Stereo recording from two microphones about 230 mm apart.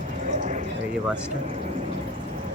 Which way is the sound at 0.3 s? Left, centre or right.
Right.